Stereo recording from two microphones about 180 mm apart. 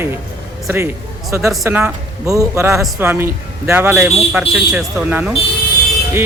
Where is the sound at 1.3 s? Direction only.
15° right (ahead or behind).